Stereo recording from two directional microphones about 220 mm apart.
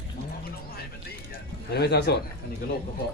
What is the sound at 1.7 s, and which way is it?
Speech, 50° left (ahead or behind).